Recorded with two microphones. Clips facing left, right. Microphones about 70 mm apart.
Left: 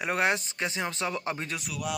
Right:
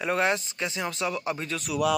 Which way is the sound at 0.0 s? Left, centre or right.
Left.